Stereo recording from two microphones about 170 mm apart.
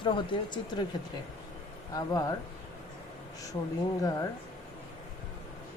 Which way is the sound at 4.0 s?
20° left (ahead or behind).